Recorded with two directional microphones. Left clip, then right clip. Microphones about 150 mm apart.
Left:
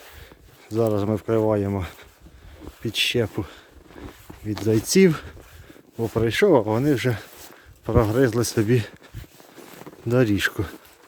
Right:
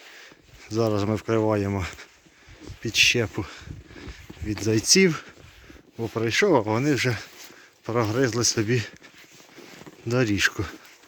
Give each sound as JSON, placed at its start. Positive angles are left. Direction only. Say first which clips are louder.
{"t": 0.6, "sound": "speech", "louder": "left 2 dB", "side_deg": 10}
{"t": 2.8, "sound": "speech", "louder": "right 2 dB", "side_deg": 20}
{"t": 6.6, "sound": "speech", "louder": "left 2 dB", "side_deg": 20}
{"t": 10.1, "sound": "speech", "louder": "left 2 dB", "side_deg": 35}